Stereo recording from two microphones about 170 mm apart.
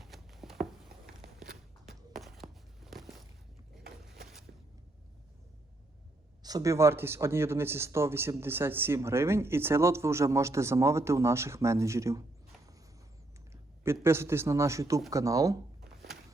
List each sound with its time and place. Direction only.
0.0 s a sound: centre (ahead or behind)
2.1 s walk: centre (ahead or behind)
4.5 s a sound: 70° right (ahead or behind)
6.4 s speech: 20° right (ahead or behind)
13.5 s a man's voice: 15° right (ahead or behind)
16.1 s walk: centre (ahead or behind)